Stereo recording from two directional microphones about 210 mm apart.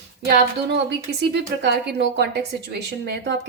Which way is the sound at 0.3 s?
50° right (ahead or behind).